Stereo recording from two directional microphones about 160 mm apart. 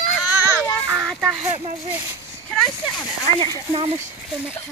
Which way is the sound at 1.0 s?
Centre (ahead or behind).